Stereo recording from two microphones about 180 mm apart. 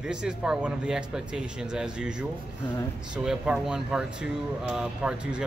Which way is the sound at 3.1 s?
5° right (ahead or behind).